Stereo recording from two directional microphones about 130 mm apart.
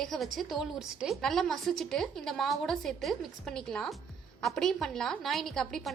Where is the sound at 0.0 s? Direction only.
Centre (ahead or behind).